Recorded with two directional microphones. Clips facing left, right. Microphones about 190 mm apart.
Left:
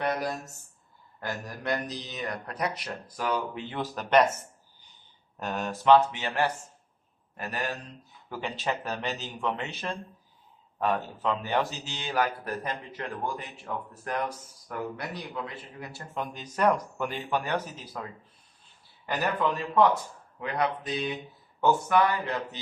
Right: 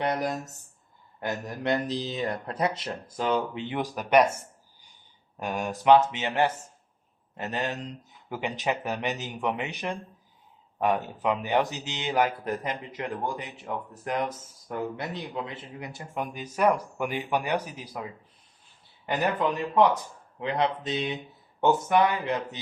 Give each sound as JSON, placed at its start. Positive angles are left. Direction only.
{"t": 0.0, "sound": "speech", "side_deg": -20}
{"t": 5.4, "sound": "speech", "side_deg": -10}
{"t": 19.0, "sound": "speech", "side_deg": -20}